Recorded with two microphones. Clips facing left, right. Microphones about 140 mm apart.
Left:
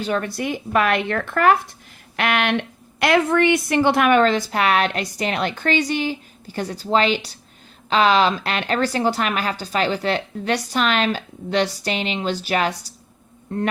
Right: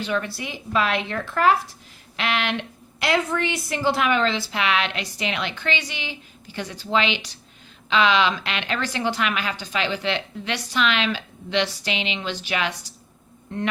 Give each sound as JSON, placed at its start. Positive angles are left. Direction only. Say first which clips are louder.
{"t": 0.0, "sound": "a woman's voice", "louder": "left 4 dB", "side_deg": 45}